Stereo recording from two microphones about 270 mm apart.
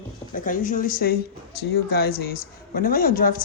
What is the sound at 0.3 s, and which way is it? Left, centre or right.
A woman's voice, left.